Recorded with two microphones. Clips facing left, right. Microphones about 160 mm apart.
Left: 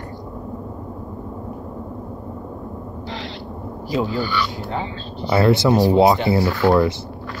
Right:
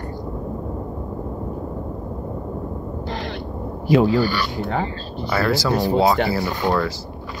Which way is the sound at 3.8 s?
70° right (ahead or behind).